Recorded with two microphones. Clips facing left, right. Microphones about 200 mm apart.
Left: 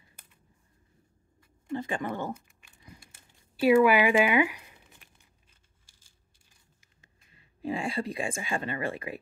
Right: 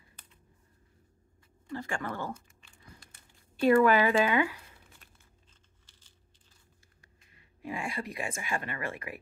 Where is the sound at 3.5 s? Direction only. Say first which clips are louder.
Left 2 dB; 10° left (ahead or behind).